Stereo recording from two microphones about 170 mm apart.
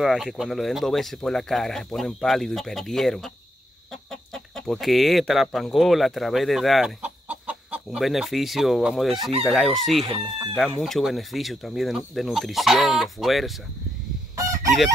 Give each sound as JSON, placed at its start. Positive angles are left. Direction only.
{"t": 0.0, "sound": "speech", "side_deg": 0}
{"t": 14.3, "sound": "fowl", "side_deg": -20}